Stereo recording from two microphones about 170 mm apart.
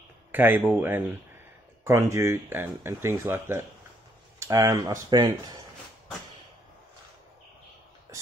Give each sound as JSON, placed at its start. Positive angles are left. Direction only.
{"t": 0.3, "sound": "speech", "side_deg": -10}